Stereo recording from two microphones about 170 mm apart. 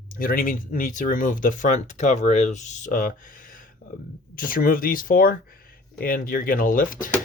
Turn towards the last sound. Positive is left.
turn(degrees=55)  # may be behind; listen again after turning